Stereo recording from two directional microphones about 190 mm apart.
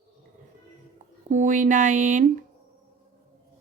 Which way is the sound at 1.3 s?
40° right (ahead or behind).